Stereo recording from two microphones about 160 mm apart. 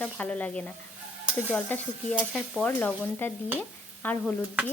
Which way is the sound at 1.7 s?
10° left (ahead or behind).